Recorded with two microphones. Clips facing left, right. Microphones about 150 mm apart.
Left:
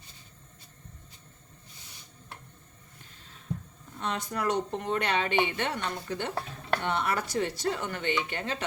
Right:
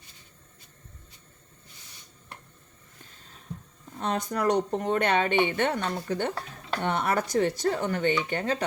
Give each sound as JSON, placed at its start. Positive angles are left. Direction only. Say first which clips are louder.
{"t": 4.0, "sound": "a woman's voice", "louder": "right 4 dB", "side_deg": -45}